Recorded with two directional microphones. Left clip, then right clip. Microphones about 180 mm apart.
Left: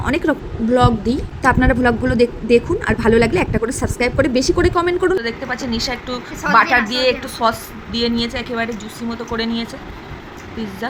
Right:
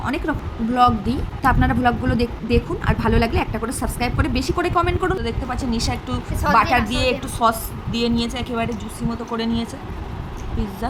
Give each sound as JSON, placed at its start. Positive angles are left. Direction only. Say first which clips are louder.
{"t": 0.0, "sound": "speech", "louder": "left 6 dB", "side_deg": 15}